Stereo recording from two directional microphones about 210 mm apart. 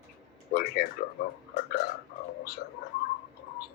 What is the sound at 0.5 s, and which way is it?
Speech, 45° left (ahead or behind).